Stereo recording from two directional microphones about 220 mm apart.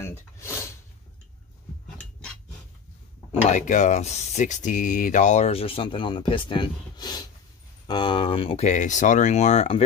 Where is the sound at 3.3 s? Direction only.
35° left (ahead or behind).